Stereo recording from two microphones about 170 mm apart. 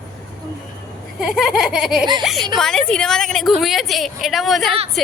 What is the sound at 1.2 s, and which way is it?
Speech, centre (ahead or behind).